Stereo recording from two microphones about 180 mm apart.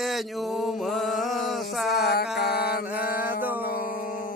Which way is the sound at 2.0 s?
60° left (ahead or behind).